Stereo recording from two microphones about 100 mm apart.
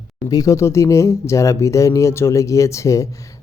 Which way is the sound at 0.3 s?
35° left (ahead or behind).